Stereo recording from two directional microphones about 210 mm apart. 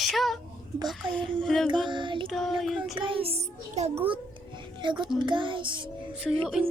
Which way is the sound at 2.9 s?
25° right (ahead or behind).